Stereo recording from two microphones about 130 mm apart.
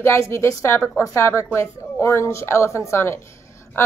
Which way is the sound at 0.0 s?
20° left (ahead or behind).